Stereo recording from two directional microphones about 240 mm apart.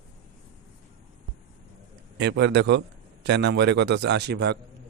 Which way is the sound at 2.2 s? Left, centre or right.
Right.